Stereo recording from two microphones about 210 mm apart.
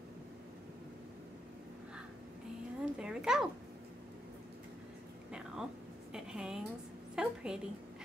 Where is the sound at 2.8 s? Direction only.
5° right (ahead or behind).